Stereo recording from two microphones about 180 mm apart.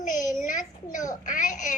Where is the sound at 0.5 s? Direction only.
45° left (ahead or behind).